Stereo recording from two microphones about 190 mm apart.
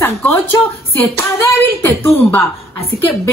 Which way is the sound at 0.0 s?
10° left (ahead or behind).